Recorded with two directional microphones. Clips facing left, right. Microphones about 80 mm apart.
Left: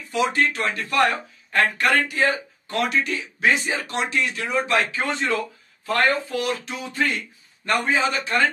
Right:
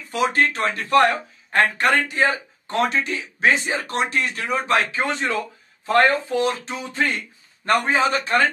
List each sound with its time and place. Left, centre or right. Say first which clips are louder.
0.1 s speech: right 1 dB; right
0.6 s speech: right 4 dB; right
3.7 s speech: right 2 dB; right
4.9 s speech: right 1 dB; right